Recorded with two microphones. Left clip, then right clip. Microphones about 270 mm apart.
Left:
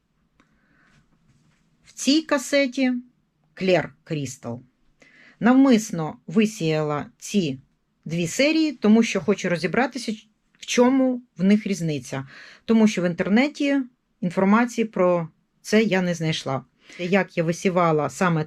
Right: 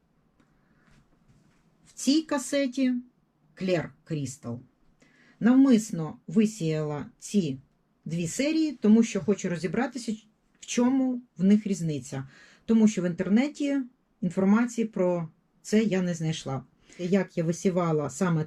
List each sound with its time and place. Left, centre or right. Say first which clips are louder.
2.4 s speech: left 6 dB; centre